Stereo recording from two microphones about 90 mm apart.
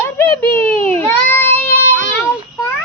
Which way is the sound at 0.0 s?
30° left (ahead or behind).